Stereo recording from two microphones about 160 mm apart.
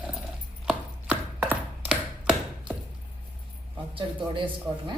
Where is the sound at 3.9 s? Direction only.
30° right (ahead or behind).